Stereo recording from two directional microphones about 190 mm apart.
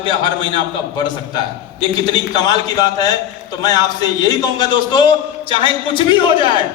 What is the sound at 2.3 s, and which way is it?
Speech, 20° left (ahead or behind).